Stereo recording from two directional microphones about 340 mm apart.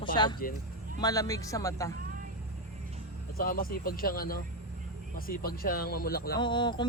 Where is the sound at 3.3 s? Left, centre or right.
Left.